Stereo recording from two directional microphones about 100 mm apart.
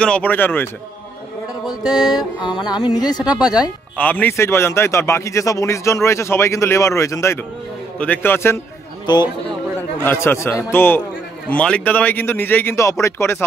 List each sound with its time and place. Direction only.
0.0 s speech: 15° left (ahead or behind)
1.7 s speech: 40° left (ahead or behind)
3.9 s a man's voice: 15° left (ahead or behind)
8.0 s a man's voice: 20° left (ahead or behind)
9.0 s a man's voice: 45° left (ahead or behind)
10.0 s a man's voice: 25° left (ahead or behind)
11.5 s a man's voice: 10° left (ahead or behind)